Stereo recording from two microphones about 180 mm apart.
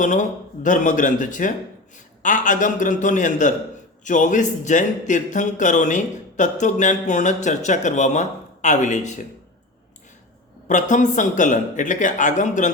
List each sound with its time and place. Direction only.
0.0 s speech: 45° left (ahead or behind)
10.7 s speech: 45° left (ahead or behind)